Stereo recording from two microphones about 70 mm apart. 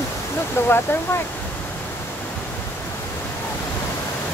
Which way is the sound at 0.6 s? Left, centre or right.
Left.